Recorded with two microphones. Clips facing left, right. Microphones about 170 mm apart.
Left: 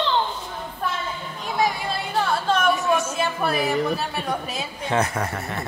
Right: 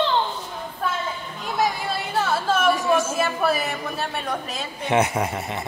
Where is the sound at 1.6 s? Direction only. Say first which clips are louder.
Even; centre (ahead or behind).